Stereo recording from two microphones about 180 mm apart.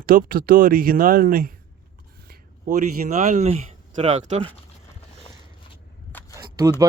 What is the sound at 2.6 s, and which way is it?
Speech, 45° right (ahead or behind).